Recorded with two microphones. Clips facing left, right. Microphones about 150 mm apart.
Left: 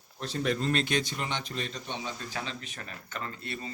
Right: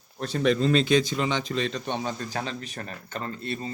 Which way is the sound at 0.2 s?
70° right (ahead or behind).